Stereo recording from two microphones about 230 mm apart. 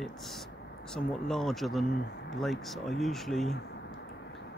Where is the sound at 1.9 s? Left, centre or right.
Left.